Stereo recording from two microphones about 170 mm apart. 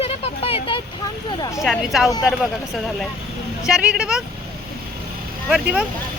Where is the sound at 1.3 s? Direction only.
20° left (ahead or behind).